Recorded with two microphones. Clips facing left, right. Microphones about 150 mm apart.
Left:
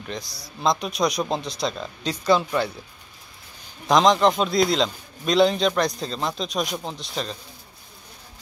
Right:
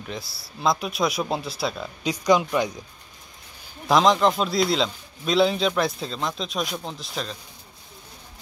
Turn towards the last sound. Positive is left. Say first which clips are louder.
# left 2 dB
turn(degrees=0)  # may be behind; listen again after turning